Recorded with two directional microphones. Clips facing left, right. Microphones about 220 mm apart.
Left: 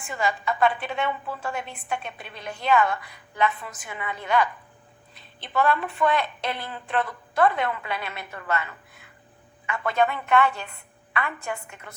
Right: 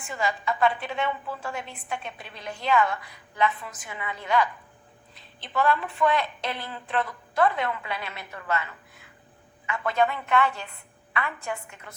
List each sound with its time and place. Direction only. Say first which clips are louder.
0.1 s a woman's voice: left 1 dB; 55° left (ahead or behind)
9.6 s a woman's voice: left 1 dB; 55° left (ahead or behind)